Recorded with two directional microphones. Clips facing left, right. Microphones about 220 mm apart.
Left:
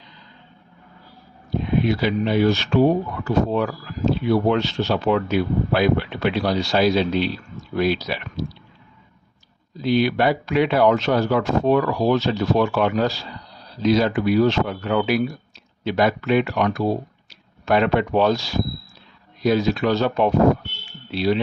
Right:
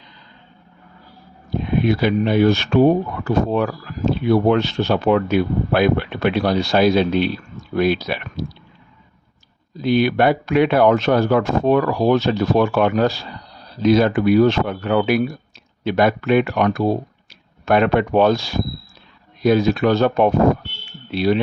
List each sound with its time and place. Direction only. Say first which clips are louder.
1.8 s speech: right 5 dB; 55° right (ahead or behind)
9.8 s speech: right 3 dB; 55° right (ahead or behind)